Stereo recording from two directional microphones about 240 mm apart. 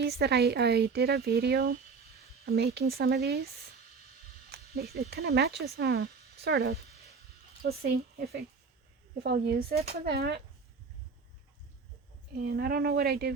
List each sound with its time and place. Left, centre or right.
0.0 s a woman's voice: right
12.4 s speech: right